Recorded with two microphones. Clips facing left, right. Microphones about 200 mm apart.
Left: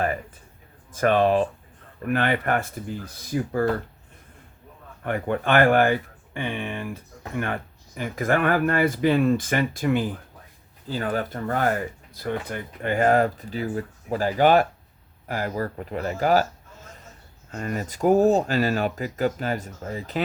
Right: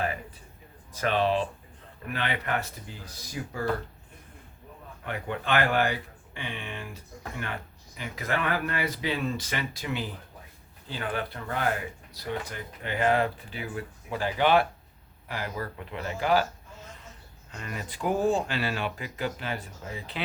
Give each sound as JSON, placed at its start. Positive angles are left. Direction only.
{"t": 0.9, "sound": "speech", "side_deg": 50}
{"t": 5.0, "sound": "speech", "side_deg": 50}
{"t": 17.5, "sound": "speech", "side_deg": 45}